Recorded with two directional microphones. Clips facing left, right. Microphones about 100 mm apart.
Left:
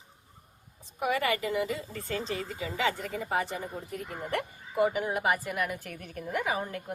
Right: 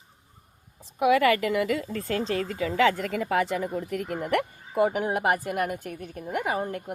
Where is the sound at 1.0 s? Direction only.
90° right; by 5.8 s 50° right (ahead or behind).